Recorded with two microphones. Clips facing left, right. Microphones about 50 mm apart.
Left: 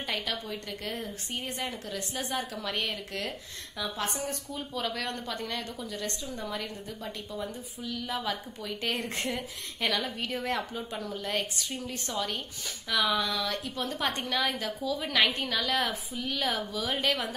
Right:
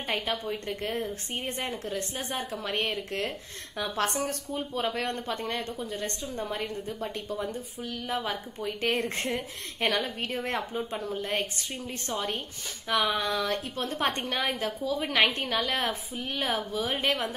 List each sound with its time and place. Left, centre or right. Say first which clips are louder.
0.0 s a woman's voice: right 3 dB; right
3.9 s speech: right 6 dB; right
4.6 s a woman's voice: right 4 dB; right